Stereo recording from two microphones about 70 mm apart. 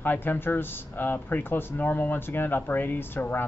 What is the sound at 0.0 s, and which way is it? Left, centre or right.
Speech, left.